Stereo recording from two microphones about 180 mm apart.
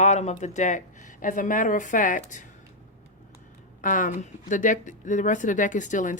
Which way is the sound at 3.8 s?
45° left (ahead or behind).